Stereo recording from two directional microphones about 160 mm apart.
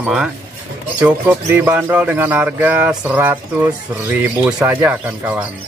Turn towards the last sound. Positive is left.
turn(degrees=-10)  # may be behind; listen again after turning